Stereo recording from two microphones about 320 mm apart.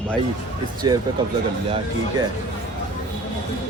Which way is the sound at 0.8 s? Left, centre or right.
Centre.